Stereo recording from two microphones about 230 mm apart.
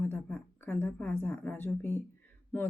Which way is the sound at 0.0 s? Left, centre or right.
Centre.